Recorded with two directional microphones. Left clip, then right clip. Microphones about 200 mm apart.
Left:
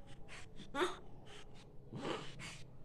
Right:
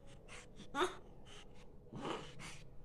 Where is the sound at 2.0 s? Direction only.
Centre (ahead or behind).